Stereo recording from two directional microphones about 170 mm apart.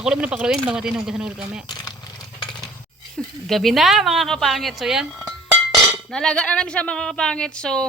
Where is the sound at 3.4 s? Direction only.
Centre (ahead or behind).